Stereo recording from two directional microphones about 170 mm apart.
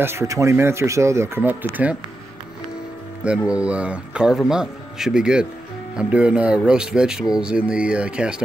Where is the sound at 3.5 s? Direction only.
5° right (ahead or behind).